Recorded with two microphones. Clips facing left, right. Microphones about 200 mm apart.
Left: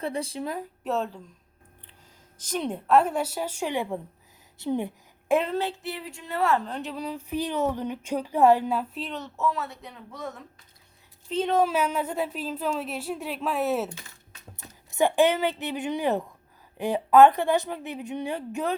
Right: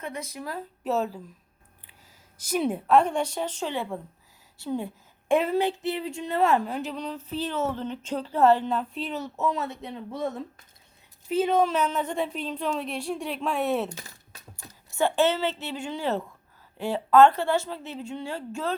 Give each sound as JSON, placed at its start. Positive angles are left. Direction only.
{"t": 0.0, "sound": "speech", "side_deg": 30}
{"t": 0.9, "sound": "speech", "side_deg": -5}
{"t": 2.4, "sound": "a woman's voice", "side_deg": -10}
{"t": 5.3, "sound": "speech", "side_deg": 0}
{"t": 5.5, "sound": "speech", "side_deg": -20}
{"t": 11.3, "sound": "speech", "side_deg": -5}
{"t": 13.9, "sound": "typing", "side_deg": -40}
{"t": 14.5, "sound": "a woman's voice", "side_deg": 20}